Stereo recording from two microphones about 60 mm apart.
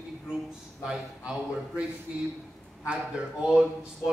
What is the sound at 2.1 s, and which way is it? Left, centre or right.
Speech, centre.